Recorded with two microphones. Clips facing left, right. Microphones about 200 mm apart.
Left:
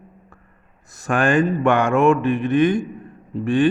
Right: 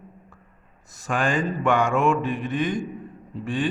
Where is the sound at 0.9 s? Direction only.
60° left (ahead or behind).